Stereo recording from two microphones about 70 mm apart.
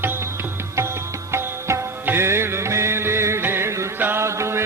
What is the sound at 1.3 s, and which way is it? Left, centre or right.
Music, right.